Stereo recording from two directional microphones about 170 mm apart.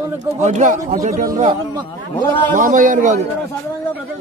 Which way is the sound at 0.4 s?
45° right (ahead or behind).